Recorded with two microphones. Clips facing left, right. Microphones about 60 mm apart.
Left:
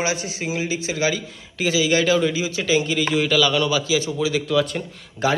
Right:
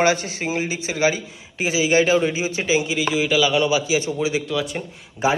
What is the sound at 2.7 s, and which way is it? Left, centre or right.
A man's voice, centre.